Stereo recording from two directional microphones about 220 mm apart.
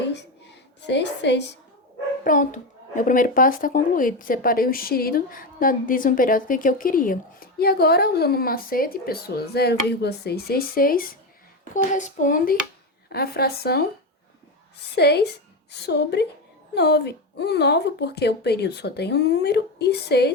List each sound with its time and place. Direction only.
0.9 s a woman's voice: 50° left (ahead or behind)
2.2 s a woman's voice: 35° left (ahead or behind)
14.9 s a woman's voice: 45° left (ahead or behind)